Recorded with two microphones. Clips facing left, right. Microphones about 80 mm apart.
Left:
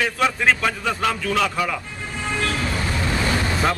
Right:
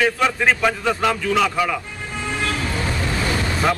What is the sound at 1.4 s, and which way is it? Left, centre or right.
Speech, centre.